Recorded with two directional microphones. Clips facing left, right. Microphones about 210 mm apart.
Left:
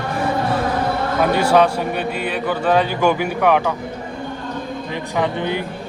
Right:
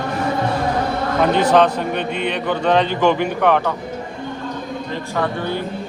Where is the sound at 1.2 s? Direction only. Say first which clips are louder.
Right 1 dB; 10° left (ahead or behind).